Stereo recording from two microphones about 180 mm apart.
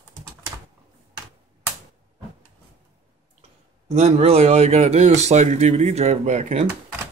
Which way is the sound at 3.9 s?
35° right (ahead or behind).